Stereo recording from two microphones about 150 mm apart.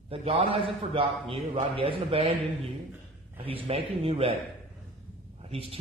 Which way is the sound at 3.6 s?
40° right (ahead or behind).